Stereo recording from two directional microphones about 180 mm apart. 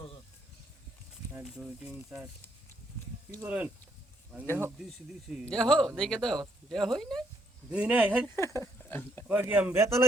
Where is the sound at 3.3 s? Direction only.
10° right (ahead or behind).